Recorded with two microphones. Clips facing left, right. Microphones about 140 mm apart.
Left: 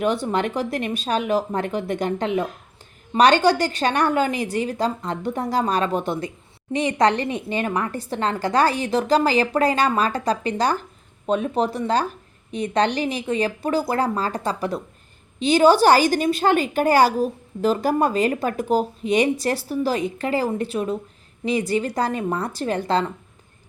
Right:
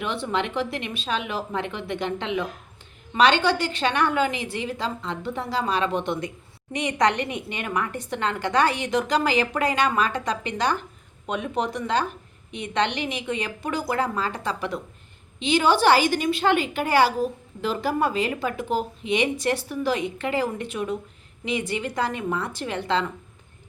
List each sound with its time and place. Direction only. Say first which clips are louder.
0.0 s a woman's voice: left 5 dB; 40° left (ahead or behind)